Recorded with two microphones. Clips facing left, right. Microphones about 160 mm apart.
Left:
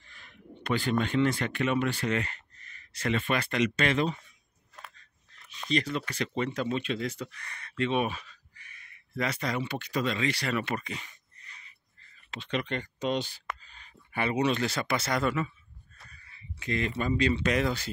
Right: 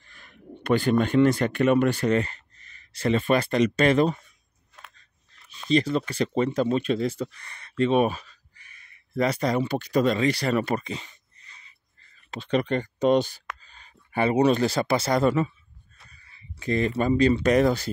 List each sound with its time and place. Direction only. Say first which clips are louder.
0.1 s speech: right 5 dB; 50° right (ahead or behind)
5.7 s speech: right 7 dB; 30° right (ahead or behind)
12.3 s speech: right 8 dB; 40° right (ahead or behind)